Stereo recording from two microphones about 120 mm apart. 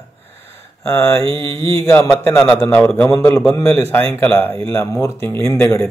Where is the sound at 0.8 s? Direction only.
25° left (ahead or behind).